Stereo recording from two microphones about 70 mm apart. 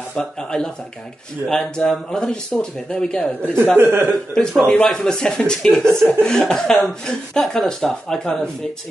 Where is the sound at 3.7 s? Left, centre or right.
Right.